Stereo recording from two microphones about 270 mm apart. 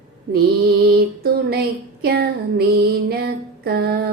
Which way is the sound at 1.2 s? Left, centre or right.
Right.